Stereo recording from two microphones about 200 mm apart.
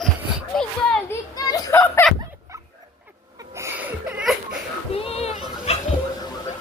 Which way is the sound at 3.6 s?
10° right (ahead or behind).